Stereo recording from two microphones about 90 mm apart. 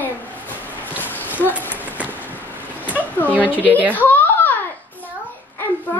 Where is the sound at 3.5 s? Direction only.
20° left (ahead or behind).